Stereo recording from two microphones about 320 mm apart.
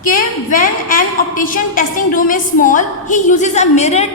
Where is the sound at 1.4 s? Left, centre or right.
Left.